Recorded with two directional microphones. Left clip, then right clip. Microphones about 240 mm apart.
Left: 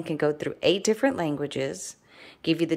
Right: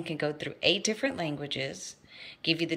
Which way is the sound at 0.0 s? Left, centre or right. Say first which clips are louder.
Left 6 dB; left.